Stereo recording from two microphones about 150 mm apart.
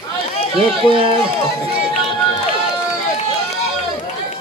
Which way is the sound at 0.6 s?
35° right (ahead or behind).